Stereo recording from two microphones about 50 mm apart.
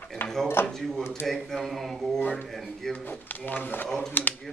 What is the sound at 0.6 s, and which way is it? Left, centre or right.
Speech, centre.